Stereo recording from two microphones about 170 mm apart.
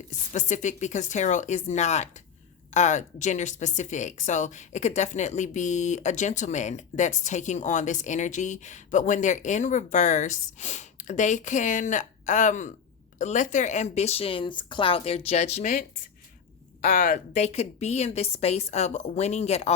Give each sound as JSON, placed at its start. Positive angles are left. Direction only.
{"t": 0.3, "sound": "speech", "side_deg": 45}
{"t": 16.8, "sound": "speech", "side_deg": 60}
{"t": 17.3, "sound": "speech", "side_deg": 40}